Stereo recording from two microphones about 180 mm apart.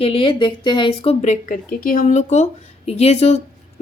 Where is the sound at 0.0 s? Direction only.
30° left (ahead or behind).